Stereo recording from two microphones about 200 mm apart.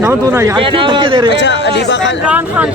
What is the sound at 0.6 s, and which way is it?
Speech, 25° right (ahead or behind).